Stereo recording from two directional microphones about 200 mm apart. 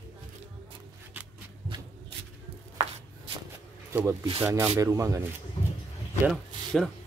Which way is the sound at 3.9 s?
10° right (ahead or behind).